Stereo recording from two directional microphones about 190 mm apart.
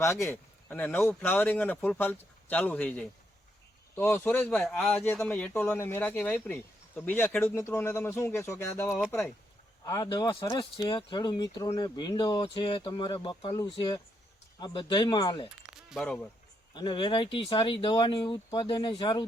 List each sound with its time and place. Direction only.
0.0 s speech: 15° left (ahead or behind)
15.6 s a sound: 5° right (ahead or behind)
16.7 s speech: 25° left (ahead or behind)